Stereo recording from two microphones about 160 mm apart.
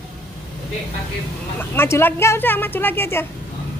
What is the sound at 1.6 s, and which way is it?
A woman's voice, 15° left (ahead or behind).